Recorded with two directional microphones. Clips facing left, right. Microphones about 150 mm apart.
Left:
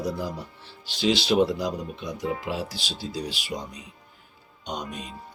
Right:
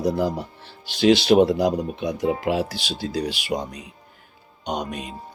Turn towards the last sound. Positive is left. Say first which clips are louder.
# right 6 dB
turn(degrees=-65)  # may be behind; listen again after turning